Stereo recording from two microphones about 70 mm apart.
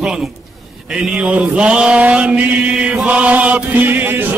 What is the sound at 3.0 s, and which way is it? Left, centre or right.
Chant, centre.